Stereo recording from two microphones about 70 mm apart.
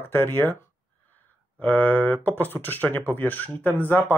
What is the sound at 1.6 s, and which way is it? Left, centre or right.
Speech, left.